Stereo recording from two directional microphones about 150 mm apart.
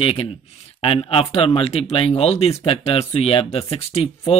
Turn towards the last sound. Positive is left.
turn(degrees=45)  # may be behind; listen again after turning